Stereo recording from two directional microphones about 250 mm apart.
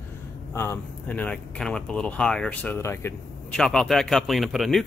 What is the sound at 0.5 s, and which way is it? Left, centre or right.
Speech, centre.